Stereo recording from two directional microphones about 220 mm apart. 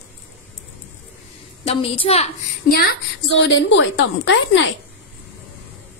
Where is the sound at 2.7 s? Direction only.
45° left (ahead or behind).